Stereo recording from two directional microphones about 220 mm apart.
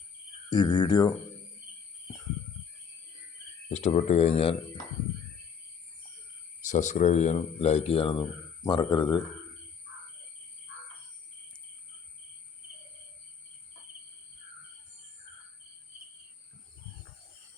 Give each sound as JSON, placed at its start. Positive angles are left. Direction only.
{"t": 0.5, "sound": "speech", "side_deg": 20}
{"t": 3.7, "sound": "speech", "side_deg": 30}
{"t": 6.7, "sound": "speech", "side_deg": 35}